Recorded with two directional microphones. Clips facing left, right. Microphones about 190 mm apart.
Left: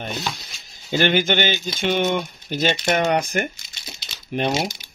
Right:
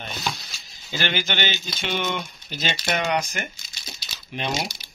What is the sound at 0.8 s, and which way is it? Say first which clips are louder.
Speech: left 8 dB; 50° left (ahead or behind).